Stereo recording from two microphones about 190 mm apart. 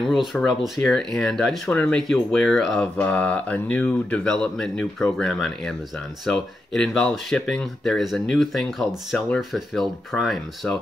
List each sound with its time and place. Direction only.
0.1 s speech: centre (ahead or behind)